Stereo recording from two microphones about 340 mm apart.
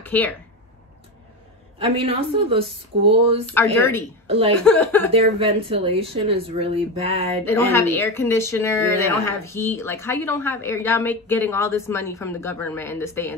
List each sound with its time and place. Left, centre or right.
0.0 s speech: centre
1.8 s speech: centre
3.5 s speech: centre
4.3 s speech: centre
4.6 s speech: centre
5.1 s speech: centre
7.4 s speech: centre